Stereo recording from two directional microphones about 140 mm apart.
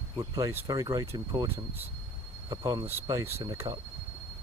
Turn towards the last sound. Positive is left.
turn(degrees=-20)  # may be behind; listen again after turning